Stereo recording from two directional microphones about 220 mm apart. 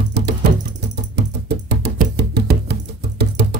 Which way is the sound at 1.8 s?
50° right (ahead or behind).